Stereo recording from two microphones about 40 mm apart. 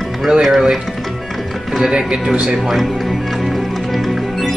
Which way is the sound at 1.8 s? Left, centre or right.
Centre.